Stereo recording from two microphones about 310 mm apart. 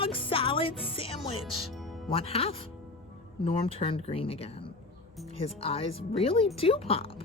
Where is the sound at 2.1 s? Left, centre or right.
Centre.